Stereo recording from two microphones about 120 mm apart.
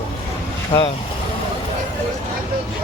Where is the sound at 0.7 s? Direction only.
45° left (ahead or behind).